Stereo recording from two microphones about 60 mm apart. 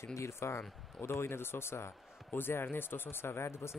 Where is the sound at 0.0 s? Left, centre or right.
Left.